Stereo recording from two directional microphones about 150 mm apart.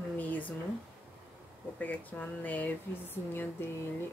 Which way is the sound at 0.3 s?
10° left (ahead or behind).